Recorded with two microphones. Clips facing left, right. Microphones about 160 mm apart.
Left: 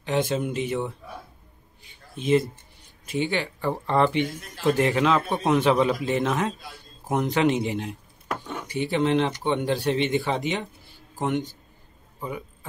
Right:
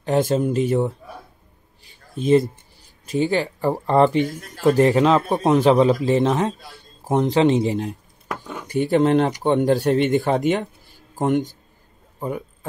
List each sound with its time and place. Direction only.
0.0 s speech: 45° right (ahead or behind)
1.9 s a sound: 40° right (ahead or behind)
3.1 s speech: 40° right (ahead or behind)
8.6 s speech: 50° right (ahead or behind)